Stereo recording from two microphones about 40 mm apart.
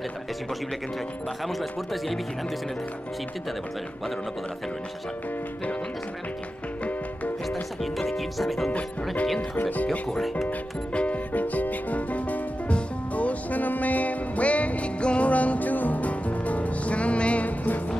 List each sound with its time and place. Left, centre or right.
1.4 s speech: centre
7.8 s speech: centre
9.6 s speech: left
9.8 s speech: centre
10.9 s music: left
11.3 s music: left